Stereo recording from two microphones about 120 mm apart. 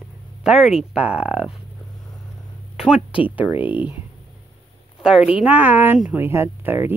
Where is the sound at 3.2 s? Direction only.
15° right (ahead or behind).